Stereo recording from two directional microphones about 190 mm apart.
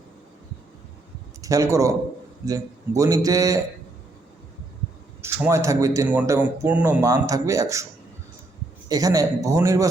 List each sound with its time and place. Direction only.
1.4 s a man's voice: 15° right (ahead or behind)
5.2 s a man's voice: 15° right (ahead or behind)
8.9 s a man's voice: 20° right (ahead or behind)